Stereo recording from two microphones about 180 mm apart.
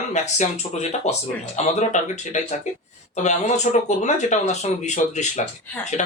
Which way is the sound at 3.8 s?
40° left (ahead or behind).